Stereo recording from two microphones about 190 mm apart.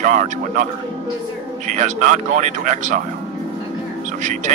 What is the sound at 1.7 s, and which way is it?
Speech, 40° right (ahead or behind).